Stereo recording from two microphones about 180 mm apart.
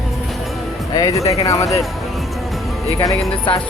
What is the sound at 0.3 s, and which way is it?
Music, centre (ahead or behind).